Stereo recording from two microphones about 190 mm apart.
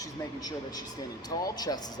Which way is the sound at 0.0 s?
20° left (ahead or behind).